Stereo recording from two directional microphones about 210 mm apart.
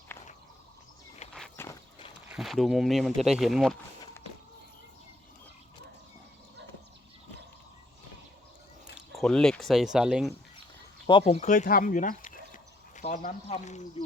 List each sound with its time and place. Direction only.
1.3 s walk: 10° left (ahead or behind)
2.3 s speech: centre (ahead or behind)
9.1 s speech: 5° left (ahead or behind)
11.0 s speech: 20° left (ahead or behind)